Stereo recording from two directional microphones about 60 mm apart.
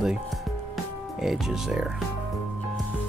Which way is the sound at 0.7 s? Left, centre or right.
Centre.